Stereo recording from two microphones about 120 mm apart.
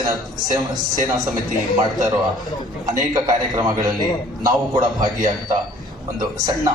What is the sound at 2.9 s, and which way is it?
A man's voice, 35° right (ahead or behind).